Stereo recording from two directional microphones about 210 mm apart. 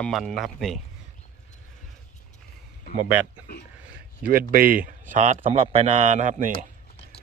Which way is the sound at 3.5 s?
50° left (ahead or behind).